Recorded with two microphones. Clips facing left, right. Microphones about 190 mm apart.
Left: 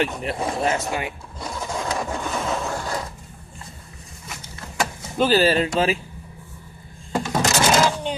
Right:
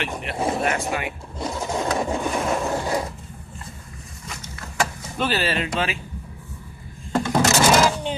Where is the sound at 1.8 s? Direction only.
25° right (ahead or behind).